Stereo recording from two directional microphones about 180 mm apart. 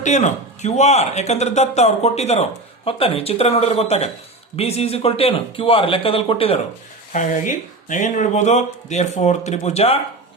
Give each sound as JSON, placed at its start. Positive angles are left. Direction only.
{"t": 0.0, "sound": "speech", "side_deg": 40}
{"t": 7.1, "sound": "speech", "side_deg": 45}